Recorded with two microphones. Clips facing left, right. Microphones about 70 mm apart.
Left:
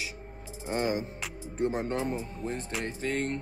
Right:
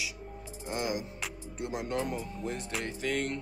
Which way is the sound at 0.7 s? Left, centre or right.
Left.